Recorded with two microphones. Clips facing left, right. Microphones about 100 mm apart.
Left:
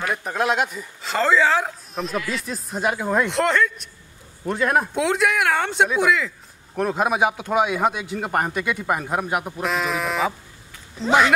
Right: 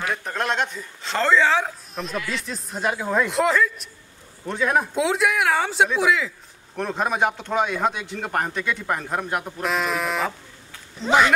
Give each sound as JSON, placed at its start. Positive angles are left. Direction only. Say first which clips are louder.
{"t": 0.0, "sound": "speech", "louder": "left 3 dB", "side_deg": 5}